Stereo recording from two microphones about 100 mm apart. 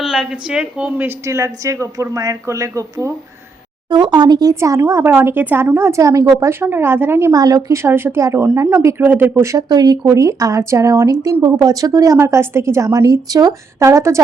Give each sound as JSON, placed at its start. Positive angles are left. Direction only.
{"t": 0.0, "sound": "speech", "side_deg": -5}
{"t": 3.8, "sound": "speech", "side_deg": -45}
{"t": 7.3, "sound": "speech", "side_deg": -35}
{"t": 9.6, "sound": "a woman's voice", "side_deg": -45}